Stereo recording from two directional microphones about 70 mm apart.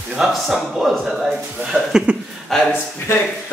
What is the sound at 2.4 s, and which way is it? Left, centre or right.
Speech, centre.